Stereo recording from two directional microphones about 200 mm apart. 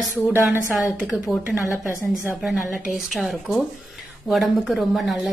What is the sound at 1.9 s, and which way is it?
Speech, 15° left (ahead or behind).